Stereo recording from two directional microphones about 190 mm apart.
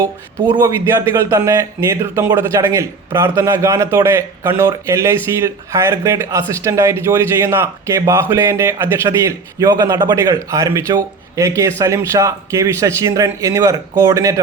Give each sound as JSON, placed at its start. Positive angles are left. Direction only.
{"t": 0.5, "sound": "speech", "side_deg": -15}